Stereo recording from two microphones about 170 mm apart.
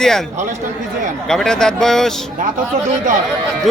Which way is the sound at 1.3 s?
5° left (ahead or behind).